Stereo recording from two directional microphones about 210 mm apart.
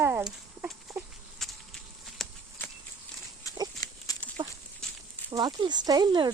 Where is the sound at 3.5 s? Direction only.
15° left (ahead or behind).